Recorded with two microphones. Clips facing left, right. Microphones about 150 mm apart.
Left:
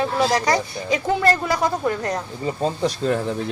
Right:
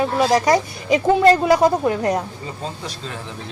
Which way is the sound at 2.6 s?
45° left (ahead or behind).